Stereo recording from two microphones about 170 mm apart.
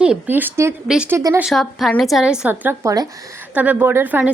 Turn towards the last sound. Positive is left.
turn(degrees=-10)  # may be behind; listen again after turning